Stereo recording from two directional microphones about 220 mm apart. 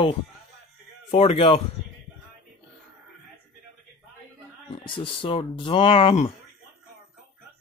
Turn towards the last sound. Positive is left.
turn(degrees=25)  # may be behind; listen again after turning